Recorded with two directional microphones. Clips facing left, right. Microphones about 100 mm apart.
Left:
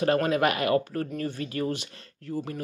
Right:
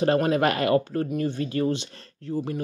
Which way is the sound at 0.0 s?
30° right (ahead or behind).